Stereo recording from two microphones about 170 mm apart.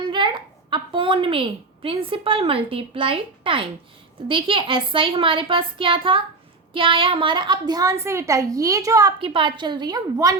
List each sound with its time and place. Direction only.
0.1 s a woman's voice: 30° right (ahead or behind)